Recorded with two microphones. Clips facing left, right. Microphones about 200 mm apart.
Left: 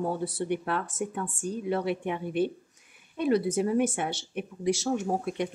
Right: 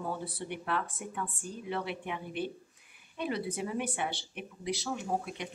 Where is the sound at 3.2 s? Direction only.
45° left (ahead or behind).